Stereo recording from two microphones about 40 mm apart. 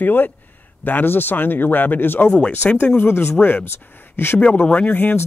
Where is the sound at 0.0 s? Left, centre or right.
Left.